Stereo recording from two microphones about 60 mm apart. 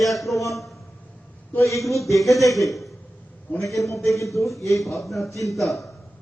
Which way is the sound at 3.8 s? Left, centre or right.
Left.